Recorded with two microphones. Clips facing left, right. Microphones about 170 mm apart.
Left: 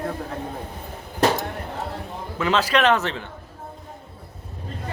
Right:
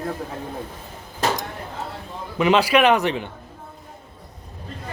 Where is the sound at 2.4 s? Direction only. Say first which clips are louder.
Right 4 dB; 15° right (ahead or behind).